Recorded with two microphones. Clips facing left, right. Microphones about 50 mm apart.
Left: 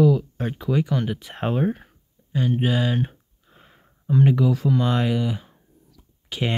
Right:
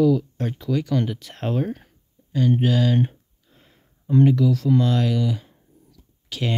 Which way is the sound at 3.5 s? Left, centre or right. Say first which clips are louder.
Left 4 dB; left.